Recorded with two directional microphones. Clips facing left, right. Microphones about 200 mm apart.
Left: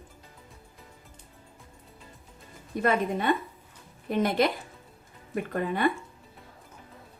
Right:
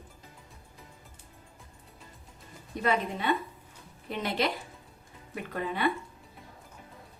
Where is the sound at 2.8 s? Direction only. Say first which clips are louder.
Left 3 dB; 50° left (ahead or behind).